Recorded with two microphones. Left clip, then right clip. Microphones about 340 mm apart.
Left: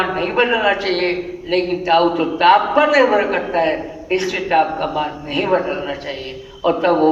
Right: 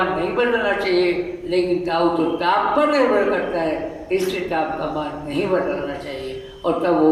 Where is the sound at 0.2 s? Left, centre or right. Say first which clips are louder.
Left 3 dB; left.